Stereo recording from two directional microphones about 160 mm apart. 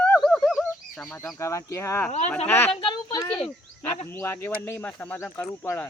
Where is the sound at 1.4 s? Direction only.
20° left (ahead or behind).